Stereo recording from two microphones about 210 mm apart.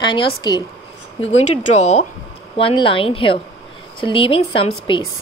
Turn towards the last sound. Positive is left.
turn(degrees=25)  # may be behind; listen again after turning